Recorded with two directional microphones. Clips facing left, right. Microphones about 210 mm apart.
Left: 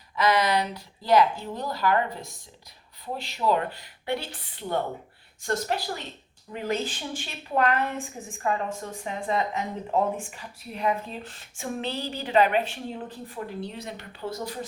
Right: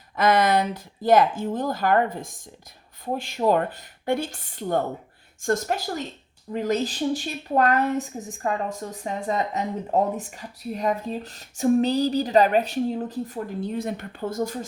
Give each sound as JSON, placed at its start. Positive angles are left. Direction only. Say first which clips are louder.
{"t": 0.2, "sound": "a woman's voice", "louder": "right 3 dB", "side_deg": -50}